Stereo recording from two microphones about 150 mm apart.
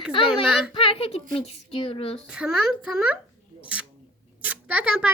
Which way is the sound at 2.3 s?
5° right (ahead or behind).